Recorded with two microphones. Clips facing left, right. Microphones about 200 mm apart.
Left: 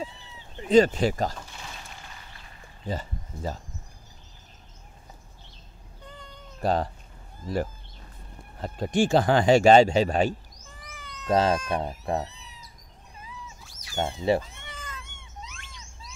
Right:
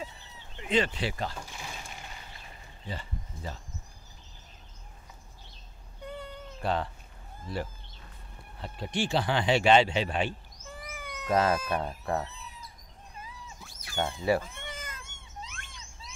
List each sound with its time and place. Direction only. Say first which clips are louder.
0.6 s speech: left 10 dB; 40° left (ahead or behind)
2.8 s speech: left 7 dB; 40° left (ahead or behind)
6.0 s cat: right 7 dB; 5° right (ahead or behind)
6.6 s speech: left 5 dB; 40° left (ahead or behind)
10.9 s cat: right 3 dB; 10° right (ahead or behind)
11.3 s speech: left 3 dB; 25° left (ahead or behind)
13.7 s a sound: right 1 dB; 55° right (ahead or behind)
14.4 s cat: right 2 dB; 50° right (ahead or behind)